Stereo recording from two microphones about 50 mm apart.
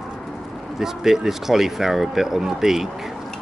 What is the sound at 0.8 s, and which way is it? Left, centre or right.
Speech, centre.